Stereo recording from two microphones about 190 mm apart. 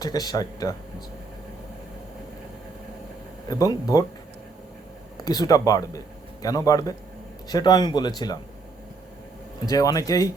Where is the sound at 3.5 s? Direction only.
20° left (ahead or behind).